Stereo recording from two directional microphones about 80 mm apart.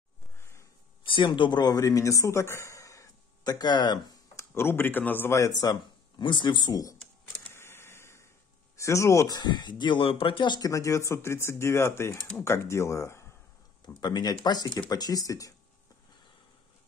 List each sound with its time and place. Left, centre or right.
0.4 s a sound: left
1.0 s speech: left
4.4 s speech: left
5.3 s speech: left
7.4 s a sound: left
8.7 s speech: left
9.3 s speech: left
10.6 s speech: left
13.8 s speech: left